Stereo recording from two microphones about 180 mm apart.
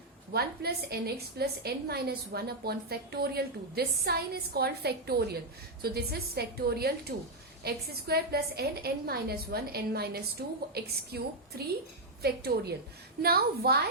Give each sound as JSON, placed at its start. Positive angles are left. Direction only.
{"t": 0.3, "sound": "a woman's voice", "side_deg": -60}